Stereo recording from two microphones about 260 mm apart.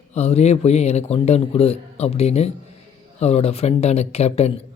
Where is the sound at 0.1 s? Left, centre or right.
Left.